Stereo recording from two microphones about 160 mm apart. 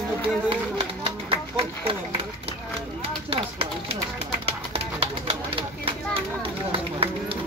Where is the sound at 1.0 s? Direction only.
35° right (ahead or behind).